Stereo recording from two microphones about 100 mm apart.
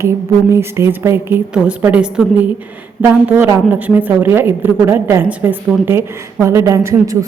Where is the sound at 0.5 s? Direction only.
25° right (ahead or behind).